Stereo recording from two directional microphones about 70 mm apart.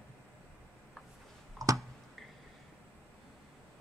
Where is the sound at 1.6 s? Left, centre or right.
Right.